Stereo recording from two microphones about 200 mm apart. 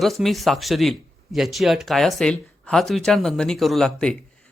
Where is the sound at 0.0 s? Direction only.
Centre (ahead or behind).